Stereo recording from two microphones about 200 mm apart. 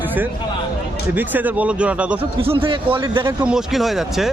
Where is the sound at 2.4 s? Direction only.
25° right (ahead or behind).